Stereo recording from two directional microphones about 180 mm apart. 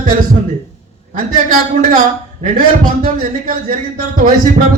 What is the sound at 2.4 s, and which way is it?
Music, 50° right (ahead or behind).